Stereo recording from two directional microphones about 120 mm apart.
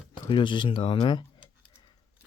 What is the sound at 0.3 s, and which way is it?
Speech, 40° left (ahead or behind).